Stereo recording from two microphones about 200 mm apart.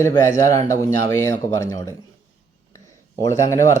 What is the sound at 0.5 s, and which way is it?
Speech, 15° left (ahead or behind).